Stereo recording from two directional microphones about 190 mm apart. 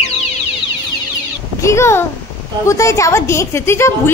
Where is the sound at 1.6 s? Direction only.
15° left (ahead or behind).